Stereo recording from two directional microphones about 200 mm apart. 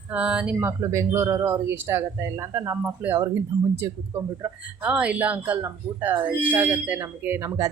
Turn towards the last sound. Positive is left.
turn(degrees=-10)  # may be behind; listen again after turning